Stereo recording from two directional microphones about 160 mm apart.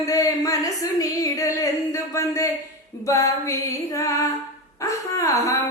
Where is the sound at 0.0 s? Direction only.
20° left (ahead or behind).